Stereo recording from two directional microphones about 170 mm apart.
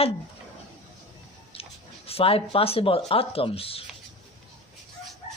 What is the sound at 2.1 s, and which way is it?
Speech, 35° left (ahead or behind).